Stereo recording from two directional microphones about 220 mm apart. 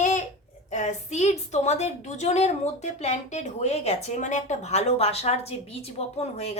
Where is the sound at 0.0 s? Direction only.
35° left (ahead or behind).